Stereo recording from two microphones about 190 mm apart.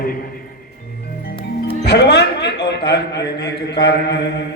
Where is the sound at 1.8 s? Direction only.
60° left (ahead or behind).